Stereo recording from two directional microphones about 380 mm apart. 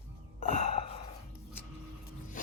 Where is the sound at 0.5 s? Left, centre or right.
Centre.